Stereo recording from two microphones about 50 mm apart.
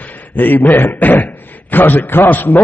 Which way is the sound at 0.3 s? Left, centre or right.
Left.